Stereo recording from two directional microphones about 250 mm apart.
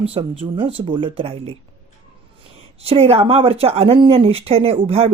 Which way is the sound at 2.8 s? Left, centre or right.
Right.